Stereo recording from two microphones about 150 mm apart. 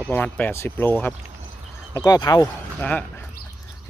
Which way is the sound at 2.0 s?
25° left (ahead or behind).